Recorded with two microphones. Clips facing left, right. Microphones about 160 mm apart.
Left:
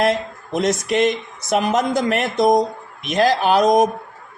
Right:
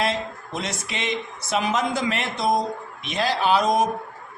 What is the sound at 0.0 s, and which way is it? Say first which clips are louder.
Speech: left 6 dB; 45° left (ahead or behind).